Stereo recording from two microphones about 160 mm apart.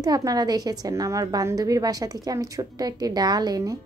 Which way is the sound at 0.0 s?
25° right (ahead or behind).